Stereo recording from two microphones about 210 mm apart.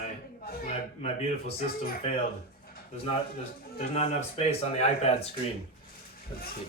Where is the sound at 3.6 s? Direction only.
45° left (ahead or behind).